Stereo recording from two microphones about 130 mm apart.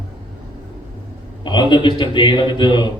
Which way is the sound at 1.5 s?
35° left (ahead or behind).